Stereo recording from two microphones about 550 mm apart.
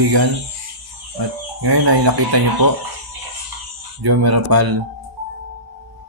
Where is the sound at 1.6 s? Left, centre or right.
Right.